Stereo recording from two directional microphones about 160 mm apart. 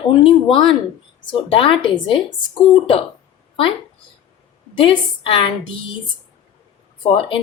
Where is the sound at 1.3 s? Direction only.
35° left (ahead or behind).